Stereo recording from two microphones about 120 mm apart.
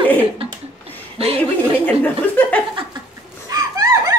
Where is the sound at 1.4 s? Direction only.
15° left (ahead or behind).